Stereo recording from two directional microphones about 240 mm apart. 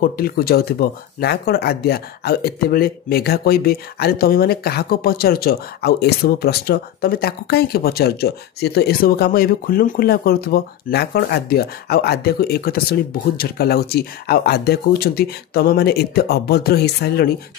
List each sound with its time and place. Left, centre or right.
0.0 s speech: left